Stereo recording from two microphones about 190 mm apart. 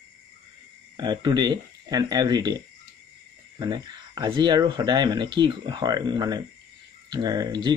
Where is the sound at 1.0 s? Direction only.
20° right (ahead or behind).